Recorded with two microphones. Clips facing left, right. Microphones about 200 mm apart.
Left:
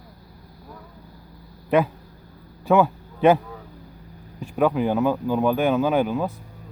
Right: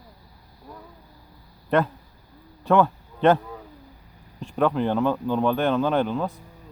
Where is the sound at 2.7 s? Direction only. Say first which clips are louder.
Left 1 dB; 5° left (ahead or behind).